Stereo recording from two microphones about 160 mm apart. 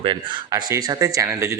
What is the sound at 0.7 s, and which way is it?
Speech, 20° right (ahead or behind).